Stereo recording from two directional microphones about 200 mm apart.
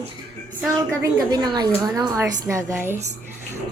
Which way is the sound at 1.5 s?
20° right (ahead or behind).